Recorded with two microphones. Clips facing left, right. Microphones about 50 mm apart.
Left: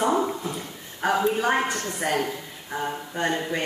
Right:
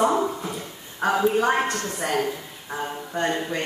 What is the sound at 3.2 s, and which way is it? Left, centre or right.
Speech, centre.